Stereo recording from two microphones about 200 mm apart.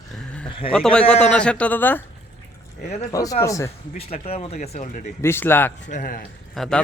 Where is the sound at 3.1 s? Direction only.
15° left (ahead or behind).